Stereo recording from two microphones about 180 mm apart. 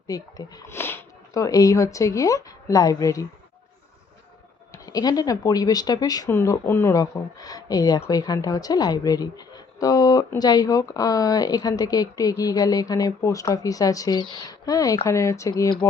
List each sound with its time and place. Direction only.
0.1 s speech: 20° left (ahead or behind)
4.7 s speech: 20° left (ahead or behind)